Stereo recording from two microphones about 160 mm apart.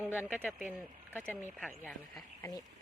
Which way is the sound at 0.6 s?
10° right (ahead or behind).